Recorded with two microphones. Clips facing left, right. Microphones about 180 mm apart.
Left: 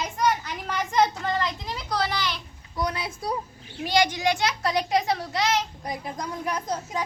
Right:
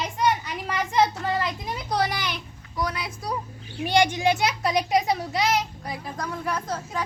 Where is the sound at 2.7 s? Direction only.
25° left (ahead or behind).